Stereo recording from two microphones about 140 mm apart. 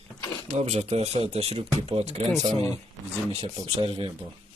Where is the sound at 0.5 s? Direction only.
50° right (ahead or behind).